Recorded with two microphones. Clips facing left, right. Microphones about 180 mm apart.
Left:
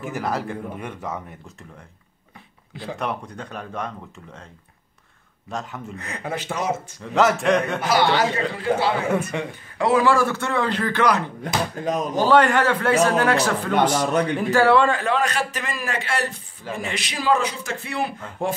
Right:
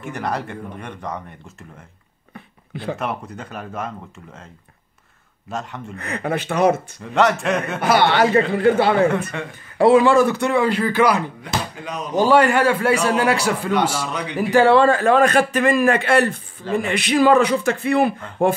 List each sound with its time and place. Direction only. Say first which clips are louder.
0.0 s speech: even; centre (ahead or behind)
3.0 s speech: right 1 dB; 5° right (ahead or behind)
5.5 s speech: right 2 dB; centre (ahead or behind)
5.9 s a man's voice: right 7 dB; 65° right (ahead or behind)
7.0 s speech: right 1 dB; centre (ahead or behind)
7.8 s a man's voice: right 3 dB; 60° right (ahead or behind)
9.3 s speech: left 2 dB; 15° left (ahead or behind)
9.8 s a man's voice: right 5 dB; 25° right (ahead or behind); by 11.2 s 10° right (ahead or behind)
11.4 s speech: left 3 dB; 45° left (ahead or behind)
12.2 s a man's voice: right 3 dB; 10° right (ahead or behind)
13.9 s speech: left 5 dB; 50° left (ahead or behind)
14.3 s a man's voice: right 3 dB; 5° right (ahead or behind)
14.6 s a man's voice: right 3 dB; 30° right (ahead or behind)
14.9 s a man's voice: right 7 dB; 45° right (ahead or behind)